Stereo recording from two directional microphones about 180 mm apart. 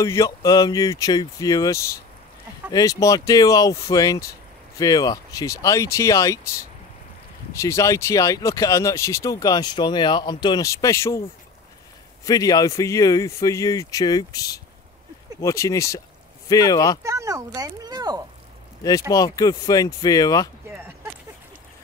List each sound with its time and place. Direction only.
0.0 s speech: 20° left (ahead or behind)
7.5 s speech: 15° left (ahead or behind)
12.3 s speech: 20° left (ahead or behind)
17.0 s speech: 15° right (ahead or behind)
18.8 s speech: 20° left (ahead or behind)
20.6 s a sound: 10° right (ahead or behind)